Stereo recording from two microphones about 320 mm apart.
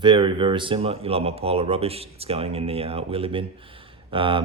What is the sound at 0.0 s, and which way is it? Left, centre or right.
Speech, centre.